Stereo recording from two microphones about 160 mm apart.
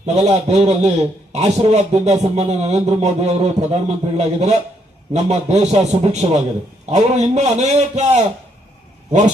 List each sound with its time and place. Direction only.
0.0 s a man's voice: 40° right (ahead or behind)